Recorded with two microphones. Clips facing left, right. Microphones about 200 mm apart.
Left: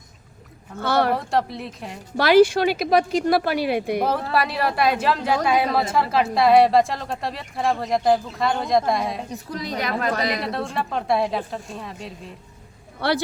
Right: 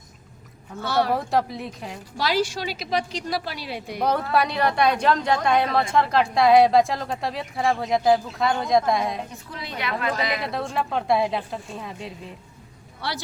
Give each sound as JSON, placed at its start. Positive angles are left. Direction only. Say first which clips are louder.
{"t": 0.8, "sound": "speech", "louder": "left 3 dB", "side_deg": 55}
{"t": 1.1, "sound": "a woman's voice", "louder": "even", "side_deg": 0}
{"t": 2.1, "sound": "speech", "louder": "left 10 dB", "side_deg": 60}
{"t": 3.9, "sound": "a woman's voice", "louder": "even", "side_deg": 5}
{"t": 9.3, "sound": "a woman's voice", "louder": "left 7 dB", "side_deg": 40}
{"t": 10.4, "sound": "a woman's voice", "louder": "left 1 dB", "side_deg": 0}
{"t": 13.0, "sound": "speech", "louder": "left 9 dB", "side_deg": 55}